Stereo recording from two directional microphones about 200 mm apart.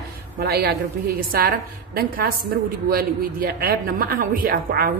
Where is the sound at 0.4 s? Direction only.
50° right (ahead or behind).